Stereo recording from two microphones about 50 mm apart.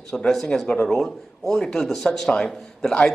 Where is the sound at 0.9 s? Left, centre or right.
Centre.